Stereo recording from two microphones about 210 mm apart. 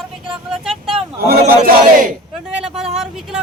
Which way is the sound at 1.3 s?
45° right (ahead or behind).